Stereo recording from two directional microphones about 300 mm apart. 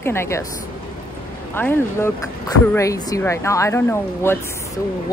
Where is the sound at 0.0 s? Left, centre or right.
Centre.